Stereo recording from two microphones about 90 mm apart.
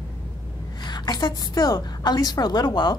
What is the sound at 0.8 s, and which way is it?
A woman's voice, 50° left (ahead or behind).